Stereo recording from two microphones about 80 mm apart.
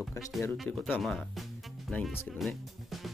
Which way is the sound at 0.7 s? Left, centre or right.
Centre.